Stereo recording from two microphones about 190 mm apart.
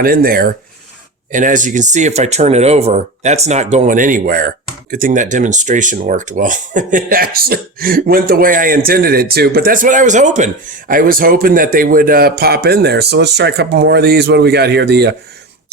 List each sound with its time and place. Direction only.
0.0 s speech: 50° right (ahead or behind)